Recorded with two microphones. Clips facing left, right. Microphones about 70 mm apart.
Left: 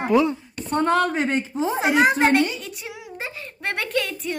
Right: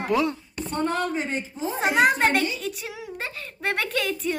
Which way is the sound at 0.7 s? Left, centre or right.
Left.